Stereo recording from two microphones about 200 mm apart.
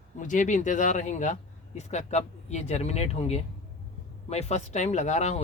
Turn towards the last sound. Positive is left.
turn(degrees=35)  # may be behind; listen again after turning